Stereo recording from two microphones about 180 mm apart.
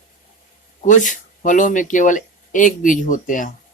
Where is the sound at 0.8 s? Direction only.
45° left (ahead or behind).